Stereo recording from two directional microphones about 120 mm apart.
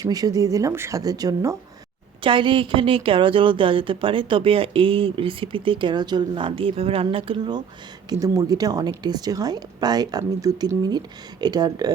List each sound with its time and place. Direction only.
0.0 s speech: 30° right (ahead or behind)
2.2 s a woman's voice: 45° right (ahead or behind)
8.1 s speech: 30° right (ahead or behind)